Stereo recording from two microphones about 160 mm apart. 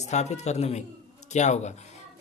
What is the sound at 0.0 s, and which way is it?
A man's voice, 45° left (ahead or behind).